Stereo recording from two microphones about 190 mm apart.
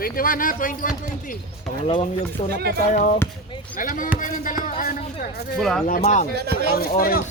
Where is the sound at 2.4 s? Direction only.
30° left (ahead or behind); by 5.4 s 50° left (ahead or behind).